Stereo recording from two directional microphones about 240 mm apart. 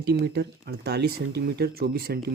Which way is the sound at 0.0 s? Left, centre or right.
Right.